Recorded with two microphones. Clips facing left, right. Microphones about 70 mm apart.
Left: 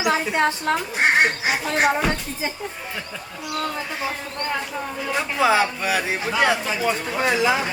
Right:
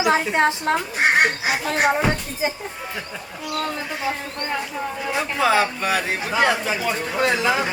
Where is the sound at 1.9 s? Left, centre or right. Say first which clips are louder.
Right 1 dB; centre.